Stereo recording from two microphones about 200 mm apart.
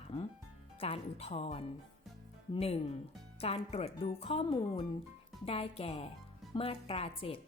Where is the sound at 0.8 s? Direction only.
30° left (ahead or behind).